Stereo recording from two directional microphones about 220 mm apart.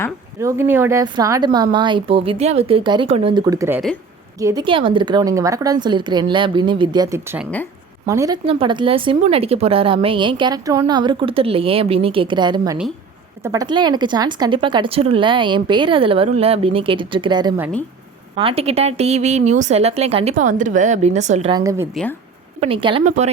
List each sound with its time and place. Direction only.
0.3 s a woman's voice: 10° right (ahead or behind); by 21.5 s 30° right (ahead or behind)
21.5 s a woman's voice: 15° right (ahead or behind); by 23.3 s 30° right (ahead or behind)